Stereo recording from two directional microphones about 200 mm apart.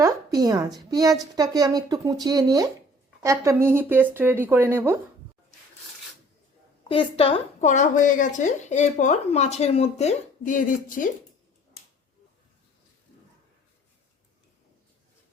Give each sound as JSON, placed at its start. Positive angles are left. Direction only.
{"t": 0.0, "sound": "a sound", "side_deg": -20}
{"t": 0.9, "sound": "a woman's voice", "side_deg": -20}
{"t": 6.8, "sound": "a woman's voice", "side_deg": 25}